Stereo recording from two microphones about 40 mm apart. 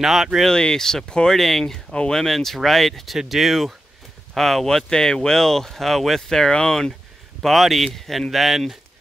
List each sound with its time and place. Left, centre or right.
0.0 s speech: centre
0.5 s speech: centre
1.9 s speech: left
2.1 s speech: centre
7.4 s speech: centre